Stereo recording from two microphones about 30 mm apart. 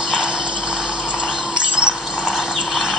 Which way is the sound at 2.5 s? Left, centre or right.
Centre.